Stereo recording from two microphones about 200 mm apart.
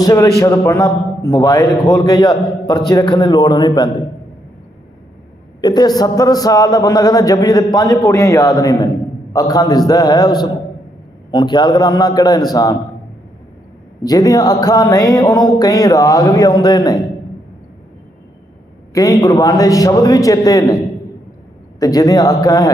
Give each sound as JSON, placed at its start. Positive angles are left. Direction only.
{"t": 0.0, "sound": "a man's voice", "side_deg": 15}
{"t": 5.5, "sound": "a man's voice", "side_deg": 20}
{"t": 14.0, "sound": "a man's voice", "side_deg": 20}
{"t": 18.9, "sound": "a man's voice", "side_deg": 20}
{"t": 21.8, "sound": "a man's voice", "side_deg": 20}